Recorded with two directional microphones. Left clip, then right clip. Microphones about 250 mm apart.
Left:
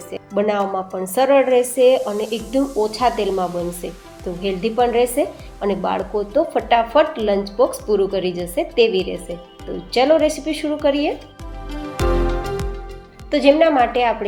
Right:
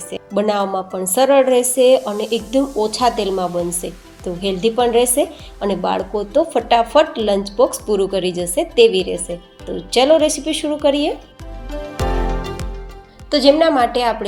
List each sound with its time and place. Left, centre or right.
0.1 s a woman's voice: right
13.3 s a woman's voice: right